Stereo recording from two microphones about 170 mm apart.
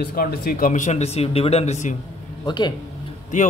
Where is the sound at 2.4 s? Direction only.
25° left (ahead or behind).